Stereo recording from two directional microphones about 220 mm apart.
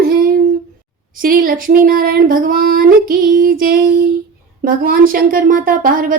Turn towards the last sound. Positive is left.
turn(degrees=-40)  # may be behind; listen again after turning